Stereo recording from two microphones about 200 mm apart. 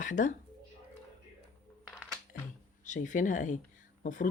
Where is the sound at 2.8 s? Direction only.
40° left (ahead or behind).